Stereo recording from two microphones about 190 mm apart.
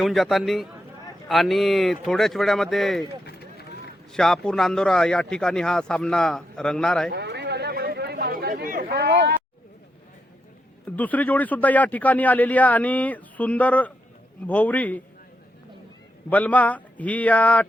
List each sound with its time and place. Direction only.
0.0 s speech: centre (ahead or behind)
4.1 s speech: 5° left (ahead or behind)
7.1 s chatter: 60° right (ahead or behind)
10.9 s speech: 10° left (ahead or behind)
16.3 s speech: 10° left (ahead or behind)